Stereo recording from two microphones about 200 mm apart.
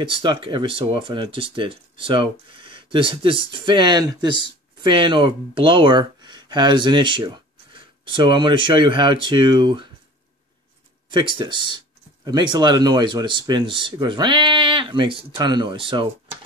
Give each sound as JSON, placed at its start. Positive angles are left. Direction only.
{"t": 0.0, "sound": "speech", "side_deg": -25}
{"t": 11.1, "sound": "speech", "side_deg": -25}